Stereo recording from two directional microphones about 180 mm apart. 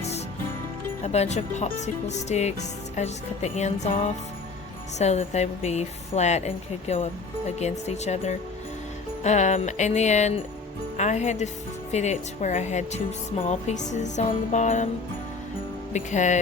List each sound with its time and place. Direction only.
1.0 s a woman's voice: 40° left (ahead or behind)
15.9 s a woman's voice: 40° left (ahead or behind)